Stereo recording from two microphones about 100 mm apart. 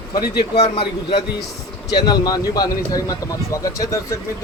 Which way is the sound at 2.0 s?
40° left (ahead or behind).